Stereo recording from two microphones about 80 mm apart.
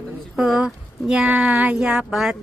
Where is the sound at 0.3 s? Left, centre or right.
Centre.